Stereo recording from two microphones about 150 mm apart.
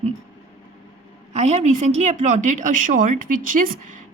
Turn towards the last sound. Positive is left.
turn(degrees=-60)  # may be behind; listen again after turning